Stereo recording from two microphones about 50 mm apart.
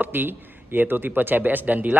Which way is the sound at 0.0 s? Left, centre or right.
Right.